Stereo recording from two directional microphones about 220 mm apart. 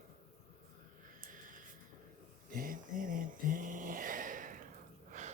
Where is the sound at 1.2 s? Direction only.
35° right (ahead or behind).